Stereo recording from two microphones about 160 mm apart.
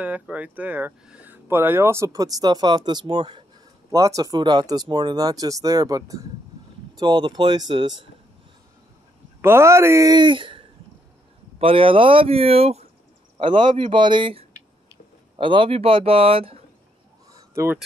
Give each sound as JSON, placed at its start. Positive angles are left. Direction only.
{"t": 0.0, "sound": "speech", "side_deg": -10}
{"t": 9.4, "sound": "speech", "side_deg": -15}
{"t": 17.3, "sound": "a sound", "side_deg": -15}